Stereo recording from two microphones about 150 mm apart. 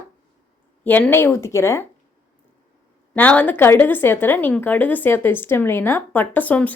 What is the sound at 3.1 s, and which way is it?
Speech, 10° left (ahead or behind).